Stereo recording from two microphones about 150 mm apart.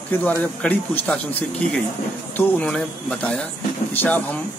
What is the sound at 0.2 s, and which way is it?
Speech, 10° left (ahead or behind).